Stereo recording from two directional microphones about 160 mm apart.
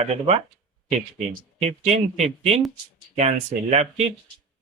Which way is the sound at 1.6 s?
45° right (ahead or behind).